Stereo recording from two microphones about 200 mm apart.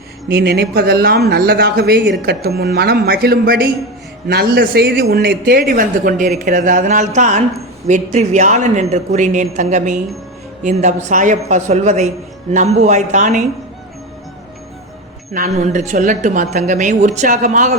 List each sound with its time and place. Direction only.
0.3 s a woman's voice: 55° right (ahead or behind); by 13.4 s 35° right (ahead or behind)
15.3 s a woman's voice: 40° right (ahead or behind)